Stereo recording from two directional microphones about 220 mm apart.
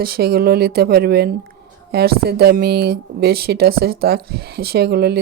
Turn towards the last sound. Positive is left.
turn(degrees=-45)  # may be behind; listen again after turning